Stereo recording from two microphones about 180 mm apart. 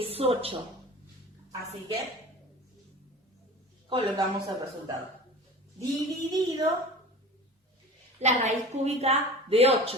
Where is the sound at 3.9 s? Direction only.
25° right (ahead or behind).